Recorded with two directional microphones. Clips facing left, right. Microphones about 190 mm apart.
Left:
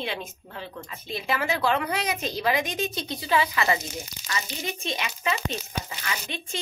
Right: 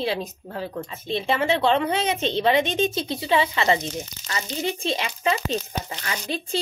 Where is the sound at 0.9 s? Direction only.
25° right (ahead or behind).